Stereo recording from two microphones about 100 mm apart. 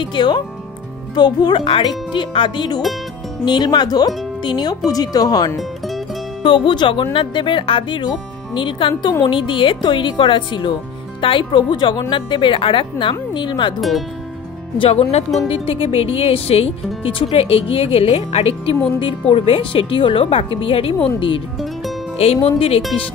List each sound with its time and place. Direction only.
0.0 s speech: 50° left (ahead or behind)
5.6 s music: centre (ahead or behind)
6.4 s speech: 55° left (ahead or behind)
13.7 s speech: centre (ahead or behind)
14.8 s speech: 90° left
15.5 s speech: 70° left (ahead or behind)
22.2 s speech: 85° left